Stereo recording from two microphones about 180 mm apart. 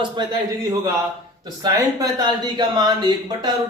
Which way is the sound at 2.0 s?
25° right (ahead or behind).